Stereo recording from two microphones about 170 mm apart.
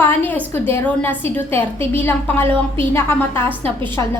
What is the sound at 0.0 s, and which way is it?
A woman's voice, 10° left (ahead or behind).